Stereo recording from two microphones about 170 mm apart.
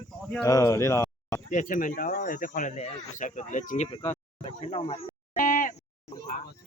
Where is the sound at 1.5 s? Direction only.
50° left (ahead or behind).